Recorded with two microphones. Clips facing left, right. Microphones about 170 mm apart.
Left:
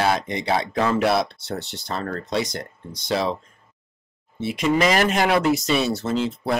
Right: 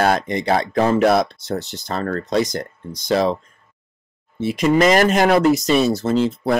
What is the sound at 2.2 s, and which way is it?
Speech, centre (ahead or behind).